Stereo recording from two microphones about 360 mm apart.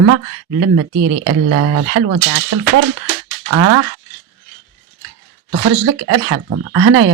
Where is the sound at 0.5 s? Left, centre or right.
Right.